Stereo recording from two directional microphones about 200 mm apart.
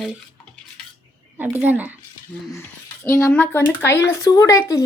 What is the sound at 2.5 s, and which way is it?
Speech, 15° left (ahead or behind).